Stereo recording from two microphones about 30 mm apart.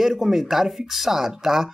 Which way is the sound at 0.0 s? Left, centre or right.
Centre.